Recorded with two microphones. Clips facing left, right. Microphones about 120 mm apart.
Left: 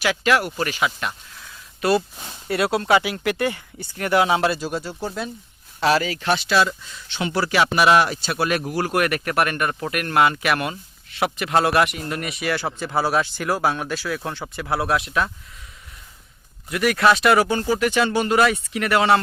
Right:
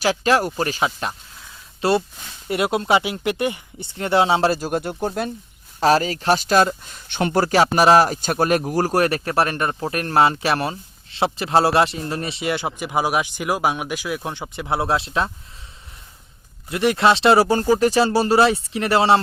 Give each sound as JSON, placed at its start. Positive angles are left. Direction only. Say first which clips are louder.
{"t": 0.0, "sound": "speech", "louder": "right 2 dB", "side_deg": -35}
{"t": 5.8, "sound": "speech", "louder": "right 3 dB", "side_deg": -40}
{"t": 16.6, "sound": "speech", "louder": "right 1 dB", "side_deg": -25}